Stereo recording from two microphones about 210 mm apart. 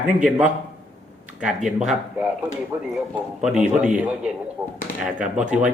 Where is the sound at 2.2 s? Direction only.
5° right (ahead or behind).